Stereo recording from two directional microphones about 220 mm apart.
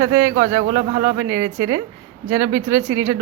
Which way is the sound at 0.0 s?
15° right (ahead or behind).